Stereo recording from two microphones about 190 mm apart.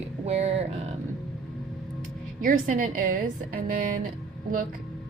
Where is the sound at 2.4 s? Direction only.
45° right (ahead or behind).